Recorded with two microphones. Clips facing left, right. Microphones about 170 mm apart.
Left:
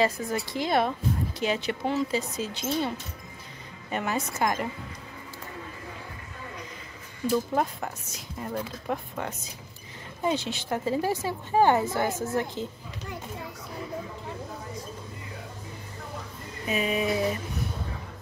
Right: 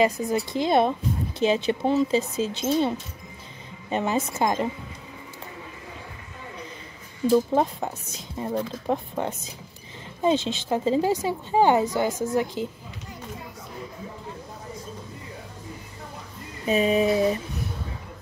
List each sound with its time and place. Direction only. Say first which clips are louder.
0.0 s speech: right 4 dB; 20° right (ahead or behind)
3.9 s speech: right 5 dB; 25° right (ahead or behind)
7.8 s a woman's voice: right 3 dB; 20° right (ahead or behind)
16.6 s a sound: right 6 dB; 30° right (ahead or behind)